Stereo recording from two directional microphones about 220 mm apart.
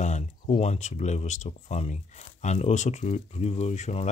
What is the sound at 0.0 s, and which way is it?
Speech, 35° left (ahead or behind).